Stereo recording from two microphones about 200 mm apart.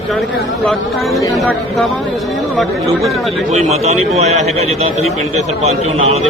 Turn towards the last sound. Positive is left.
turn(degrees=-30)  # may be behind; listen again after turning